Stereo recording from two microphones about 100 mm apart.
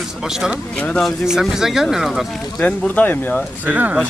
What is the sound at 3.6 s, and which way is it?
Speech, 15° right (ahead or behind).